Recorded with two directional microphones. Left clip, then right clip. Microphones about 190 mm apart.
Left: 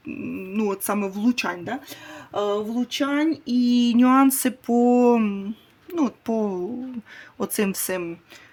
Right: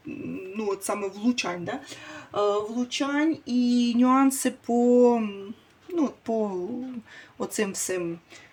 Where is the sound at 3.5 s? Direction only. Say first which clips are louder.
Left 4 dB; 45° left (ahead or behind).